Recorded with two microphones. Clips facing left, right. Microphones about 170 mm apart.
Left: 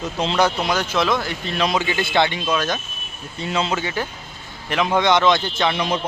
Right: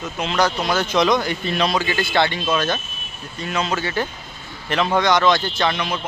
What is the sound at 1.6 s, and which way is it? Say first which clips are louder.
Speech: left 1 dB; 20° left (ahead or behind).